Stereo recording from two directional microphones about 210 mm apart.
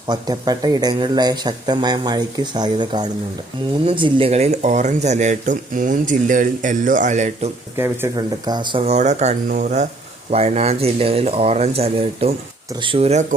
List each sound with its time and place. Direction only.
0.1 s speech: 20° right (ahead or behind); by 7.5 s 35° right (ahead or behind)
7.8 s speech: 15° right (ahead or behind)